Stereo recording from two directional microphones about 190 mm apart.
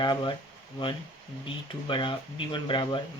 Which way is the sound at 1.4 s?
25° left (ahead or behind).